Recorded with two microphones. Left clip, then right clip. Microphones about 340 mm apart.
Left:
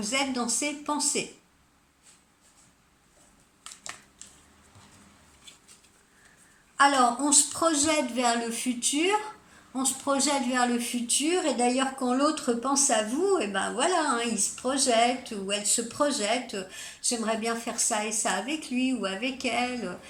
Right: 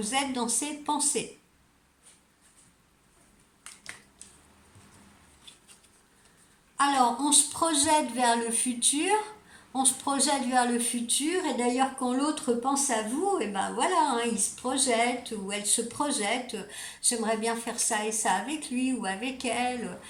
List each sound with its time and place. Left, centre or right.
0.0 s speech: centre
6.7 s speech: centre